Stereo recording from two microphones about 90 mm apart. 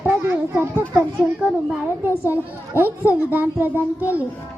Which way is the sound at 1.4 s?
15° right (ahead or behind).